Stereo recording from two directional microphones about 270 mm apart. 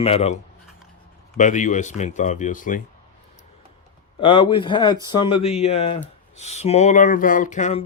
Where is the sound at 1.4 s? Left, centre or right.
Left.